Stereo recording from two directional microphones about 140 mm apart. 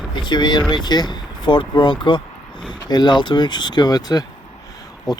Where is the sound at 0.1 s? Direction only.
30° left (ahead or behind).